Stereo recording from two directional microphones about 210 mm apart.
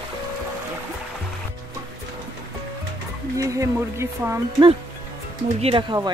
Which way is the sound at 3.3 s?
15° right (ahead or behind).